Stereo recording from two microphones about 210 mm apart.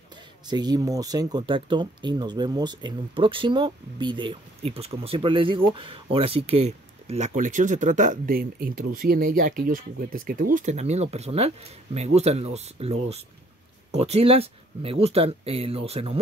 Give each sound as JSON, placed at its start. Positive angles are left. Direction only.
{"t": 0.5, "sound": "speech", "side_deg": -20}